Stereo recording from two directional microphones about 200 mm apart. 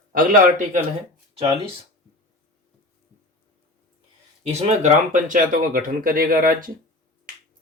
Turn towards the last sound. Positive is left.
turn(degrees=-45)  # may be behind; listen again after turning